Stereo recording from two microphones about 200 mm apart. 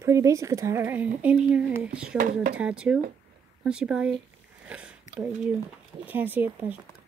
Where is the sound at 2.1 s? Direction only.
40° right (ahead or behind).